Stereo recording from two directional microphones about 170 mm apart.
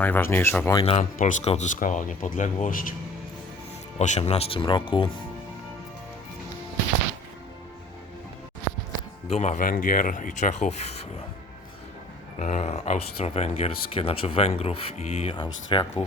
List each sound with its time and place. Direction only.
0.0 s speech: 10° left (ahead or behind)
0.7 s speech: 30° left (ahead or behind); by 2.9 s 55° left (ahead or behind)
3.9 s speech: 40° left (ahead or behind)
9.3 s speech: 45° left (ahead or behind)
12.4 s speech: 45° left (ahead or behind); by 16.0 s 25° left (ahead or behind)